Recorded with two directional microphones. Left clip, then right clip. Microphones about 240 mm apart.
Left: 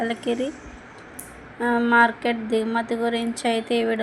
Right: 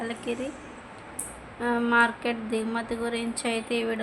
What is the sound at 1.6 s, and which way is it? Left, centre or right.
A woman's voice, centre.